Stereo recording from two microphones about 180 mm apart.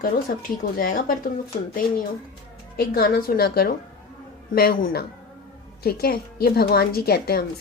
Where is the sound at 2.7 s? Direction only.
55° left (ahead or behind).